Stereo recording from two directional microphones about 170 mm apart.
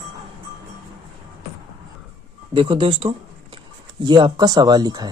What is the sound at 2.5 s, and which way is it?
Speech, 30° right (ahead or behind).